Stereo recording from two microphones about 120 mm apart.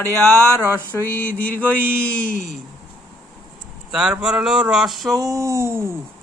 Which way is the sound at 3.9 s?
5° right (ahead or behind).